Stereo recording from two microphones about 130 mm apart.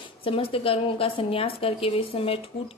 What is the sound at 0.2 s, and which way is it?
A woman's voice, 45° left (ahead or behind).